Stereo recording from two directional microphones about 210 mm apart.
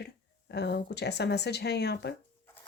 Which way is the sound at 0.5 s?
50° left (ahead or behind).